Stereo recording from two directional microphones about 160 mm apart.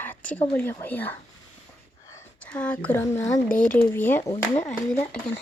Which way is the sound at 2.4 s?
5° left (ahead or behind).